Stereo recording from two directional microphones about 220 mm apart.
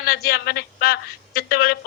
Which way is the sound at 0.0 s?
45° left (ahead or behind).